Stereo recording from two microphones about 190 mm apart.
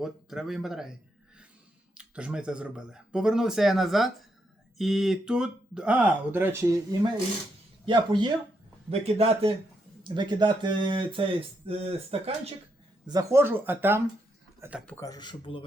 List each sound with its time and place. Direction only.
0.0 s speech: centre (ahead or behind)
2.0 s speech: 5° right (ahead or behind)
7.9 s a man's voice: 25° right (ahead or behind)
13.1 s speech: 20° right (ahead or behind)
14.8 s speech: 15° left (ahead or behind)